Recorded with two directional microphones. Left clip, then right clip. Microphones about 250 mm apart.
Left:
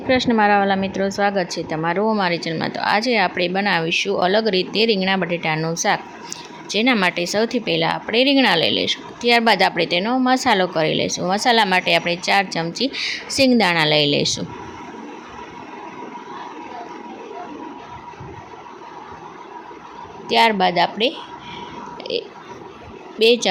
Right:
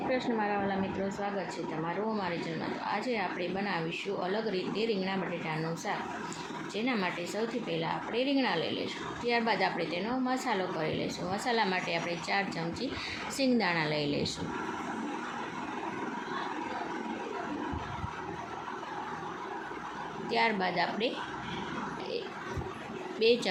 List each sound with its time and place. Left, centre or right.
0.1 s speech: left
20.2 s speech: left
22.1 s speech: left